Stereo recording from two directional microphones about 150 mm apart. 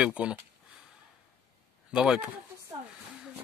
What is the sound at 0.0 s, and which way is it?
Speech, 5° right (ahead or behind).